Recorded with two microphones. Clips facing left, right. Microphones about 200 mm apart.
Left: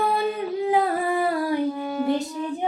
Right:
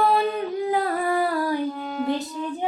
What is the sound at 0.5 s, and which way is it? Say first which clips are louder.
Humming: left 4 dB; 20° left (ahead or behind).